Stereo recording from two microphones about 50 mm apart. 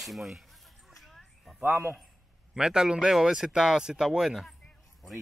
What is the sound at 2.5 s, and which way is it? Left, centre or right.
Speech, centre.